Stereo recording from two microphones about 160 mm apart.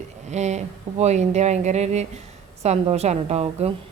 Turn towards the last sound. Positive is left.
turn(degrees=-40)  # may be behind; listen again after turning